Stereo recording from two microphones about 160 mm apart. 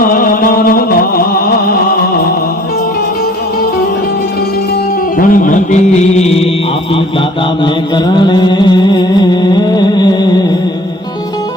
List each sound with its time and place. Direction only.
0.0 s music: 60° left (ahead or behind)
5.3 s music: 55° left (ahead or behind)
8.1 s music: 30° left (ahead or behind)